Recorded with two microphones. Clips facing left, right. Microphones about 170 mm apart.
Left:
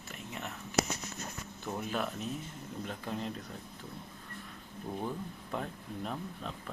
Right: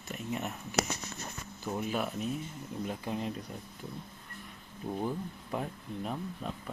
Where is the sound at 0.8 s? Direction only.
65° right (ahead or behind).